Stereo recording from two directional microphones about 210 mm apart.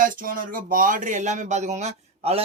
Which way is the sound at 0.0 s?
40° right (ahead or behind).